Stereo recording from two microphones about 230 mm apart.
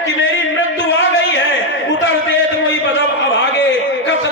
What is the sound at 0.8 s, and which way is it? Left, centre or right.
Music, left.